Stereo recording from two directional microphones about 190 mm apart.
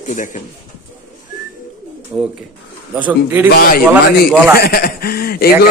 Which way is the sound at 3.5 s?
55° left (ahead or behind).